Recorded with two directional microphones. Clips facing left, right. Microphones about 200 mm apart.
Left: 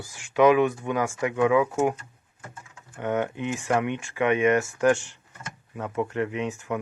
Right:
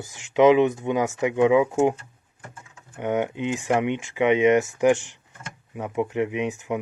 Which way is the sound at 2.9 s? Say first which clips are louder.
Right 2 dB; 15° right (ahead or behind).